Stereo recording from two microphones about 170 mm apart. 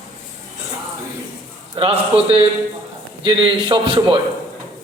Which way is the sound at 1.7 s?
35° right (ahead or behind).